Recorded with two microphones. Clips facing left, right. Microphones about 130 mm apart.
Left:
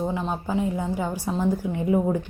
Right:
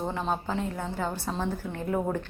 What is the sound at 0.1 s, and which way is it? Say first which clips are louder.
A woman's voice: left 3 dB; 5° left (ahead or behind).